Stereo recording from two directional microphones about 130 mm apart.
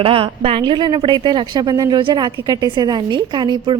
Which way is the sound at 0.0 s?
45° right (ahead or behind).